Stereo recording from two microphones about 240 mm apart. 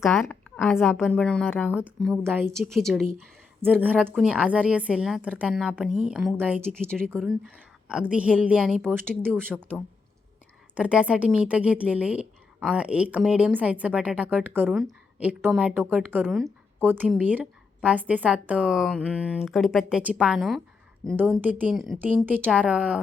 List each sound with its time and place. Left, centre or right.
0.0 s a woman's voice: centre